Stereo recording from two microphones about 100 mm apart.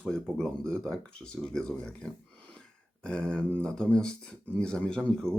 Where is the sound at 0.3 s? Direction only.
5° left (ahead or behind).